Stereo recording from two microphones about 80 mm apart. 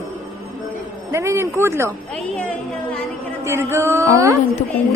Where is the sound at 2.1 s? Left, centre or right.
Centre.